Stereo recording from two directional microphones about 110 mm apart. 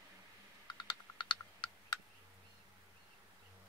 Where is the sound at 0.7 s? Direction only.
45° left (ahead or behind).